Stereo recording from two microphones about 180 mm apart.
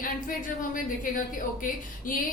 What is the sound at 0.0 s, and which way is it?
A woman's voice, 50° left (ahead or behind).